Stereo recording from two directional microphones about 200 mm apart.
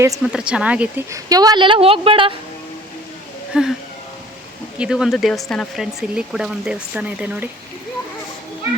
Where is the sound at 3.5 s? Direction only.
5° right (ahead or behind).